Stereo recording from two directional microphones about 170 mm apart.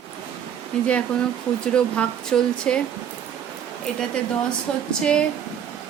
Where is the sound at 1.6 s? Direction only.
5° left (ahead or behind).